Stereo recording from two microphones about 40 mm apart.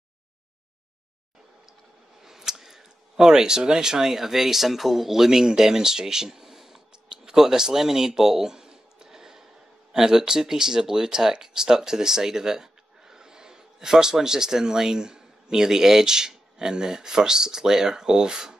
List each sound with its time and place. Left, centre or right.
2.2 s speech: centre